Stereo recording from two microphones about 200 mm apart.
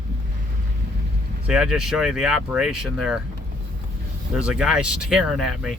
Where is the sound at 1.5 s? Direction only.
5° right (ahead or behind).